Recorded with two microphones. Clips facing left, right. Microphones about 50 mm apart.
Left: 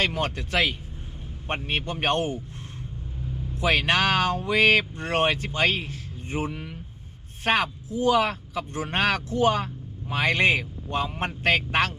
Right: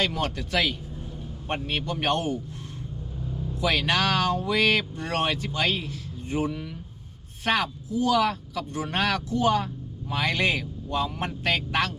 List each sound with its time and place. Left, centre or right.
0.0 s speech: left
3.6 s speech: left